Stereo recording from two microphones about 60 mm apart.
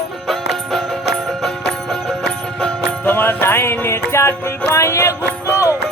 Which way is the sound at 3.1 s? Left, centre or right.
Left.